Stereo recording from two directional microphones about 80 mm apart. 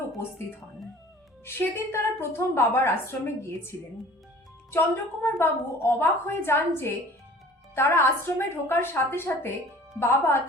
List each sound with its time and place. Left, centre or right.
1.5 s a woman's voice: left
5.2 s a woman's voice: left